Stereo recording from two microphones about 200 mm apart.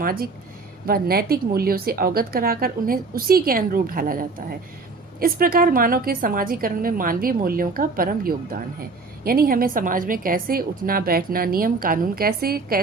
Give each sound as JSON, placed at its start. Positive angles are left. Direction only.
{"t": 0.0, "sound": "a woman's voice", "side_deg": -45}